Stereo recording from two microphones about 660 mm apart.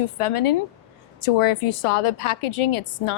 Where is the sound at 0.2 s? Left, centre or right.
Left.